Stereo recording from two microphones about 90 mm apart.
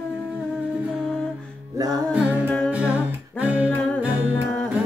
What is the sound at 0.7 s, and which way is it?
Humming, 15° right (ahead or behind).